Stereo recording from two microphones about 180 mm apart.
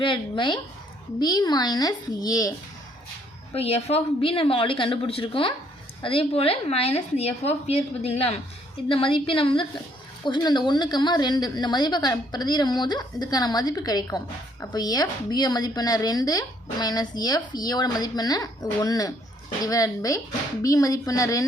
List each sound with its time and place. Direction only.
0.0 s a woman's voice: 25° left (ahead or behind)
3.5 s a woman's voice: 35° left (ahead or behind); by 21.4 s 20° left (ahead or behind)